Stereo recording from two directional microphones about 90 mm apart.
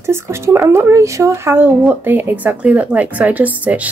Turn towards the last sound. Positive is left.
turn(degrees=-15)  # may be behind; listen again after turning